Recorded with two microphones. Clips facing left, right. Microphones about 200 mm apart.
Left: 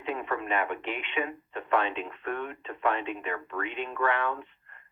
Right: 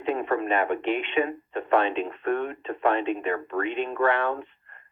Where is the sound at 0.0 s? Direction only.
40° right (ahead or behind).